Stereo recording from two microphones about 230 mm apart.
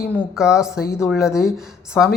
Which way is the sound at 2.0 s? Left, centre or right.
Centre.